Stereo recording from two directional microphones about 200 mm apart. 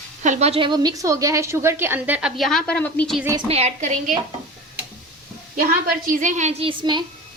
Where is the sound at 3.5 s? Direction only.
30° right (ahead or behind).